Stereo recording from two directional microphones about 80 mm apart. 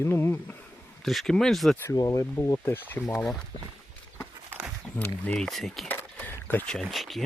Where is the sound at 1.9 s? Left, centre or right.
Left.